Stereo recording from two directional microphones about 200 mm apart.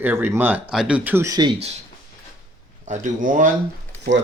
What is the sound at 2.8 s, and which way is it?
Speech, 40° right (ahead or behind).